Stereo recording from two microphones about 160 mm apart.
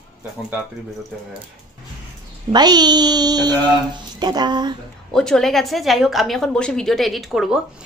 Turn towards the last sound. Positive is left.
turn(degrees=-5)  # may be behind; listen again after turning